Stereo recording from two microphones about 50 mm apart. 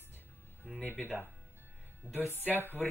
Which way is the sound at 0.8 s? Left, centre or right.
Left.